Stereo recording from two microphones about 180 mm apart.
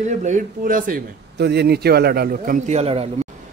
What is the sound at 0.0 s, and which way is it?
A man's voice, 40° right (ahead or behind).